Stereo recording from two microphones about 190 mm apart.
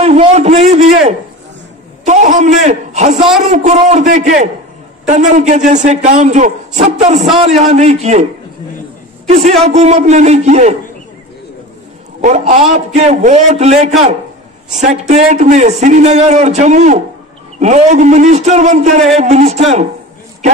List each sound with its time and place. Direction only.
0.0 s a sound: 35° right (ahead or behind)
3.4 s a man's voice: 40° right (ahead or behind)
9.3 s a man's voice: 35° right (ahead or behind)
12.2 s a man's voice: 40° right (ahead or behind)